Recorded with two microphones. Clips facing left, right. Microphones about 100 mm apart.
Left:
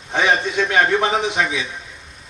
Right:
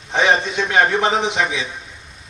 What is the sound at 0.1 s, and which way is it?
A man's voice, 20° right (ahead or behind).